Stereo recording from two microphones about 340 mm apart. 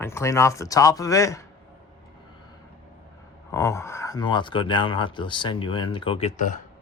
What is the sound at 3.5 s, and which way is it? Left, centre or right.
Speech, centre.